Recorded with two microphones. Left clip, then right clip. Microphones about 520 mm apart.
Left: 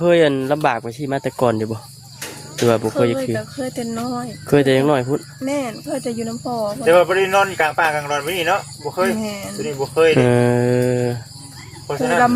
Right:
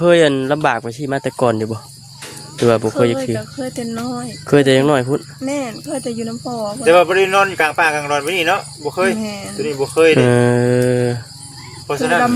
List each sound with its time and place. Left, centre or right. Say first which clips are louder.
0.0 s speech: right 3 dB; left
6.8 s speech: right 3 dB; centre
9.1 s speech: right 1 dB; left
9.6 s speech: right 3 dB; centre
10.2 s speech: right 2 dB; left